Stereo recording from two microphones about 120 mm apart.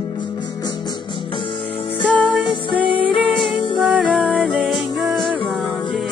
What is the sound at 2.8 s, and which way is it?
Music, 45° left (ahead or behind).